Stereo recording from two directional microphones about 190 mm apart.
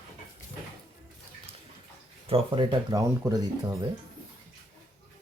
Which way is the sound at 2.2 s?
30° right (ahead or behind).